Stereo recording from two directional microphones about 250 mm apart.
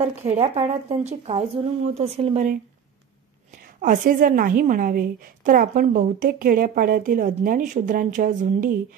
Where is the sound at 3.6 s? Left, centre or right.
Right.